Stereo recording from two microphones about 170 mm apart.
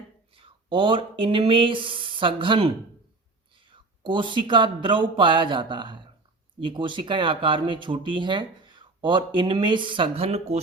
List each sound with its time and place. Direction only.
0.3 s speech: 30° right (ahead or behind)